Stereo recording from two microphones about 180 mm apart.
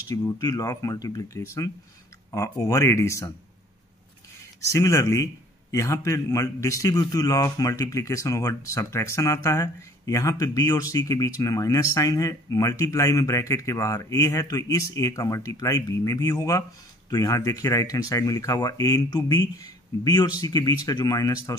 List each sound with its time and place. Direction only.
0.1 s a man's voice: 20° left (ahead or behind)
4.6 s a man's voice: 15° left (ahead or behind)